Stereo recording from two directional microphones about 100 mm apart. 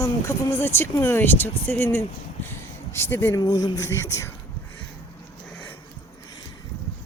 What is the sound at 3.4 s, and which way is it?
Speech, 40° left (ahead or behind).